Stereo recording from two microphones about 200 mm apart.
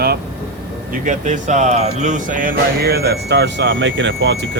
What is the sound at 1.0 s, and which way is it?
Speech, 35° right (ahead or behind).